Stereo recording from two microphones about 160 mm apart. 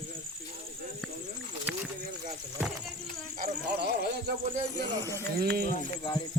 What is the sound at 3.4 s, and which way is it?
Insect, 75° right (ahead or behind).